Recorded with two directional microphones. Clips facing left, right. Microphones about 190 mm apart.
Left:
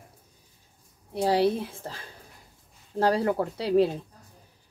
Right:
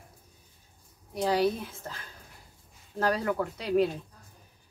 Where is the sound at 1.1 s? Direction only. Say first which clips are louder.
Left 3 dB; 30° left (ahead or behind).